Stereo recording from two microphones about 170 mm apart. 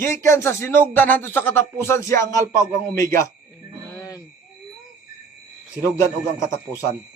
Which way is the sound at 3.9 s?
20° left (ahead or behind).